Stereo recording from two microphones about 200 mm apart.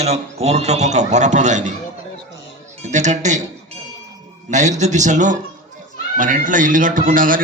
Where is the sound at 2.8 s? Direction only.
35° right (ahead or behind).